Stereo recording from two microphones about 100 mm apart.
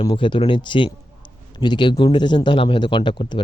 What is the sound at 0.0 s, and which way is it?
A man's voice, 55° left (ahead or behind).